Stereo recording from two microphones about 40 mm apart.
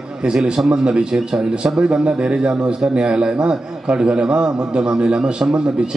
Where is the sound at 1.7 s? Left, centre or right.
Right.